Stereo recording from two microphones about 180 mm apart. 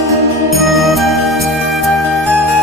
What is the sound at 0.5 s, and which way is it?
Music, centre (ahead or behind).